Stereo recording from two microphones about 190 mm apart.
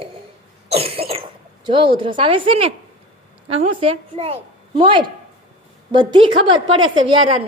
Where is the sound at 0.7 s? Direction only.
30° right (ahead or behind).